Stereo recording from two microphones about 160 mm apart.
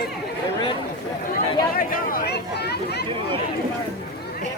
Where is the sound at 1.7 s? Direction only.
60° left (ahead or behind); by 3.0 s 90° left.